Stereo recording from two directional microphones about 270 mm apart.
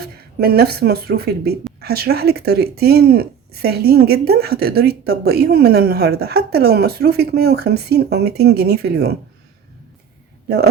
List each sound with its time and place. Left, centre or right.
0.0 s speech: right